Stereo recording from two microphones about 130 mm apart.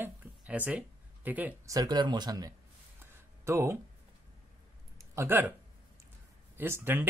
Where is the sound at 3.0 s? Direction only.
20° right (ahead or behind).